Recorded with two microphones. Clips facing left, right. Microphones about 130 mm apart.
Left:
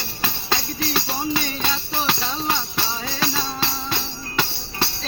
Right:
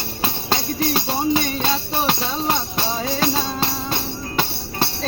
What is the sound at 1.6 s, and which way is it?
Music, 40° right (ahead or behind).